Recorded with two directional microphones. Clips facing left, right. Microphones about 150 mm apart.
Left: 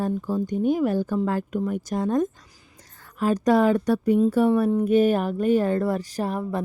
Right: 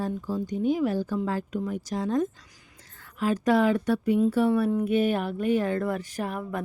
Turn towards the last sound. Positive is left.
turn(degrees=35)  # may be behind; listen again after turning